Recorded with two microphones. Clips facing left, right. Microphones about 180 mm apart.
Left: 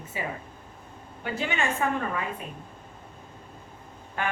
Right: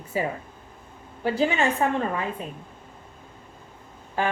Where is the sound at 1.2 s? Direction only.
35° right (ahead or behind).